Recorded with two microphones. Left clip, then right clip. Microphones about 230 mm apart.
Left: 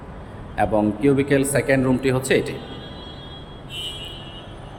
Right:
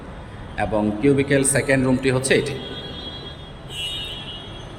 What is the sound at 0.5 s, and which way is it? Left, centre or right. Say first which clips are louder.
A man's voice: left 2 dB; centre.